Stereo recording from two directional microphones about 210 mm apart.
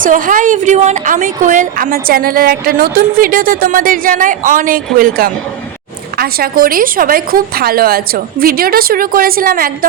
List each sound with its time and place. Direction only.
0.0 s a woman's voice: 40° right (ahead or behind)